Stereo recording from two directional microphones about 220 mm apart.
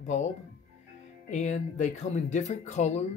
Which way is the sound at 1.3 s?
30° left (ahead or behind).